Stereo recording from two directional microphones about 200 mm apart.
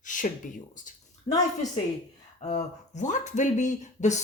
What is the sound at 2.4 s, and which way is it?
Speech, 35° left (ahead or behind).